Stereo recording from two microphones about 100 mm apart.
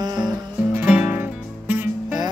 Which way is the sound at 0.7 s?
10° right (ahead or behind).